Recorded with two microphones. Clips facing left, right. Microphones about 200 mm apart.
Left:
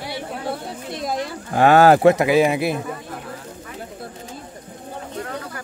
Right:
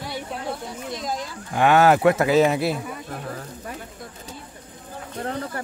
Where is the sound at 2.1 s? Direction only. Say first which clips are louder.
Left 1 dB; 15° left (ahead or behind).